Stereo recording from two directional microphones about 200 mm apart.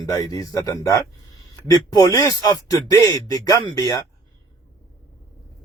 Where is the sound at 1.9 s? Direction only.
15° left (ahead or behind).